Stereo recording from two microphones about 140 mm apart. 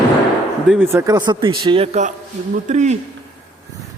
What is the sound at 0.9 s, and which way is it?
Speech, 20° right (ahead or behind).